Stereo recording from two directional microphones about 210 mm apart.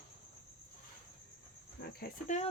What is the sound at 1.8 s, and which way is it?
Speech, 45° left (ahead or behind).